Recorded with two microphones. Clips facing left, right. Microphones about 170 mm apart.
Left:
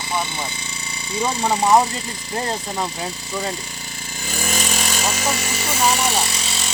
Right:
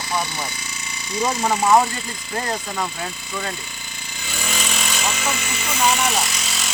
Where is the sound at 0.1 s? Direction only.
25° left (ahead or behind).